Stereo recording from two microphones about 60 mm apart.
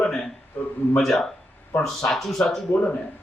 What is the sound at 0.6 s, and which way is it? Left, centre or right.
Speech, left.